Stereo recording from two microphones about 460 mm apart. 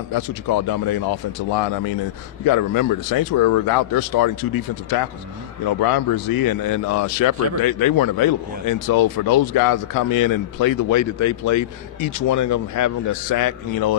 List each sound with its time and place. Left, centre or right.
0.1 s speech: left
2.4 s speech: left